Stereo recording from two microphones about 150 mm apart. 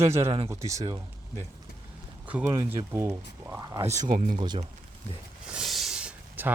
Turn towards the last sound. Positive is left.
turn(degrees=-10)  # may be behind; listen again after turning